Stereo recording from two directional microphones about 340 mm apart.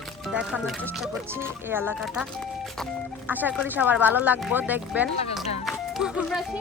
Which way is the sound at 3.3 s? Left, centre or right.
Centre.